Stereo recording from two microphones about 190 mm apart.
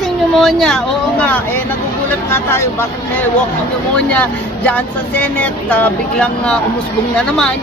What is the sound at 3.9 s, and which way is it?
Speech, 5° left (ahead or behind).